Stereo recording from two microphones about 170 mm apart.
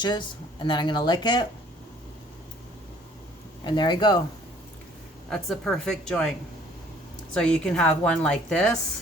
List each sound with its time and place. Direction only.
0.0 s speech: 25° left (ahead or behind)
3.6 s speech: 25° left (ahead or behind)
5.3 s a woman's voice: 5° left (ahead or behind)
7.3 s a woman's voice: 5° left (ahead or behind)